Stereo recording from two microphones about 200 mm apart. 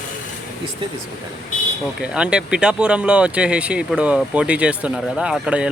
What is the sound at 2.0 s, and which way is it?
Speech, 5° right (ahead or behind).